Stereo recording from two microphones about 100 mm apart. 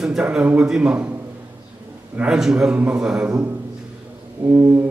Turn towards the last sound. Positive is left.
turn(degrees=-25)  # may be behind; listen again after turning